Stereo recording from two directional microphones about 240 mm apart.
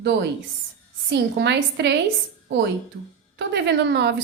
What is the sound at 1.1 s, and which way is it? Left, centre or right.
Speech, right.